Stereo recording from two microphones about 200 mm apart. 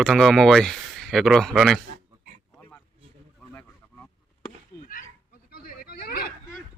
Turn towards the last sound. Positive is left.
turn(degrees=50)  # may be behind; listen again after turning